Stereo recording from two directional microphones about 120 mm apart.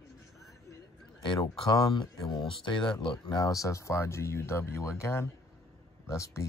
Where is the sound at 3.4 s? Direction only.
30° left (ahead or behind).